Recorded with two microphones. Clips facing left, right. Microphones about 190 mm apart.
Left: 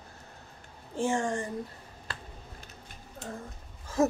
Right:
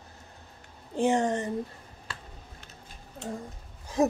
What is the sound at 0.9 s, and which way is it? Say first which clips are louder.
Speech: right 4 dB; 20° right (ahead or behind).